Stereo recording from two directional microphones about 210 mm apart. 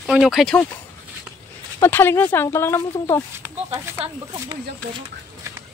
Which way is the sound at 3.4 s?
10° right (ahead or behind).